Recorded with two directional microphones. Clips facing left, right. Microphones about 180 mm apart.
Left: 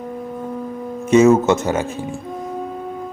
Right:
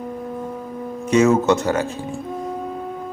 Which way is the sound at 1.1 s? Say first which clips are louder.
Left 3 dB; 20° left (ahead or behind).